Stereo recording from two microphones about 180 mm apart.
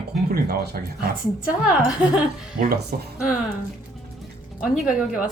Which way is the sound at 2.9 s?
55° right (ahead or behind).